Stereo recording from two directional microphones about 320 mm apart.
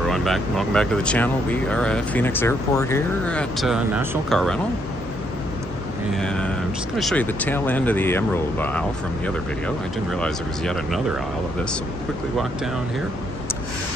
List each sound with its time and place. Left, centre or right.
0.1 s speech: centre
6.1 s speech: centre